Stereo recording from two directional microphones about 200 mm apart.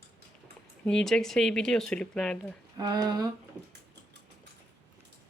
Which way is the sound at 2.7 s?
20° right (ahead or behind).